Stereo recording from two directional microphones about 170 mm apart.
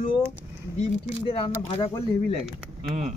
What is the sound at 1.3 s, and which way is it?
Speech, 35° left (ahead or behind).